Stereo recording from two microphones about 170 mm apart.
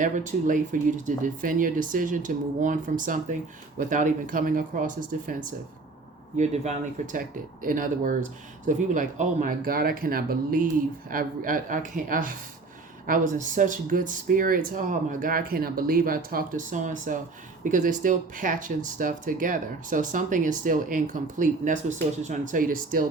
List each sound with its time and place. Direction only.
0.0 s speech: 50° right (ahead or behind)
7.6 s speech: 55° right (ahead or behind)